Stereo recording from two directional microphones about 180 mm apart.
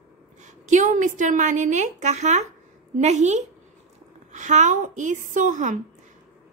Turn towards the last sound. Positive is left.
turn(degrees=-45)  # may be behind; listen again after turning